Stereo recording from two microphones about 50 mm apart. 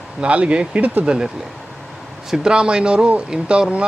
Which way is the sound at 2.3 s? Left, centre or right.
Centre.